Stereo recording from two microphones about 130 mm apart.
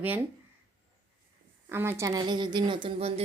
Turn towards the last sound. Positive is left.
turn(degrees=-45)  # may be behind; listen again after turning